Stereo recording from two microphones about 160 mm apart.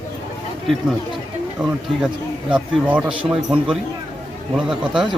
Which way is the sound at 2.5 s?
10° right (ahead or behind).